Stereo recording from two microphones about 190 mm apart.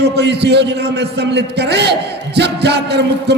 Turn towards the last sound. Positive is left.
turn(degrees=-60)  # may be behind; listen again after turning